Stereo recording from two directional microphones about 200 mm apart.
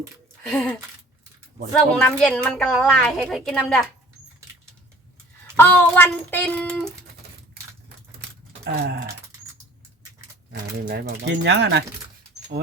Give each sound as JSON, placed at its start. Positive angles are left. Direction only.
{"t": 0.4, "sound": "a woman's voice", "side_deg": 5}
{"t": 2.0, "sound": "a woman's voice", "side_deg": 5}
{"t": 5.5, "sound": "speech", "side_deg": 10}
{"t": 8.6, "sound": "groan", "side_deg": -50}
{"t": 10.5, "sound": "speech", "side_deg": -55}